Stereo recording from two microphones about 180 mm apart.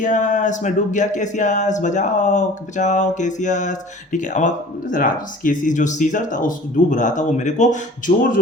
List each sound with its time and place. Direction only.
0.0 s speech: 45° left (ahead or behind)